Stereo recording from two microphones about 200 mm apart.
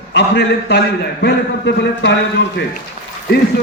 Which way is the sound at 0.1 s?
60° left (ahead or behind).